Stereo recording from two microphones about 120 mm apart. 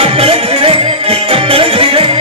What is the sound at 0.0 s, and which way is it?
Music, 55° right (ahead or behind).